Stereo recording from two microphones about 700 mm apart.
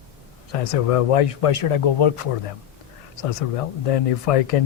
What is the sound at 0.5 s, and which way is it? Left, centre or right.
Speech, left.